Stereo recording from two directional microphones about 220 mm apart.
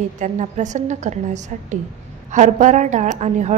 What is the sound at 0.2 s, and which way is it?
A woman's voice, 35° right (ahead or behind).